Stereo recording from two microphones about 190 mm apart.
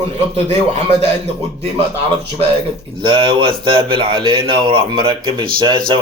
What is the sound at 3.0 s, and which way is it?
Speech, 25° right (ahead or behind).